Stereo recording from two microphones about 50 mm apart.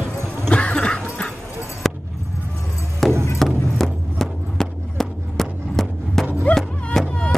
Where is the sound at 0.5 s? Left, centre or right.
Left.